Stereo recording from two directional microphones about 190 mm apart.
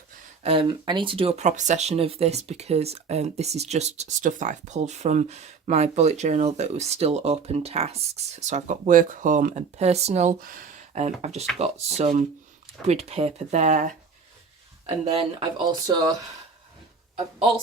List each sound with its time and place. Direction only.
0.4 s speech: 25° right (ahead or behind)
14.8 s speech: 30° right (ahead or behind)